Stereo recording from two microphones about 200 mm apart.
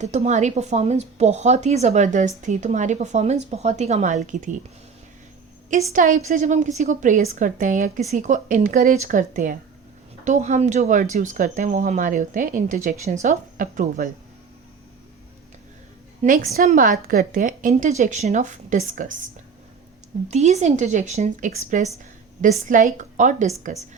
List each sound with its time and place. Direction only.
0.0 s a woman's voice: 35° right (ahead or behind)
5.9 s a woman's voice: 40° right (ahead or behind)
16.2 s a woman's voice: 45° right (ahead or behind)
20.2 s a woman's voice: 35° right (ahead or behind)